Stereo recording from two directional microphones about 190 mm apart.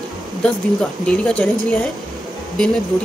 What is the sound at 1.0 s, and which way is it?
Speech, 5° left (ahead or behind).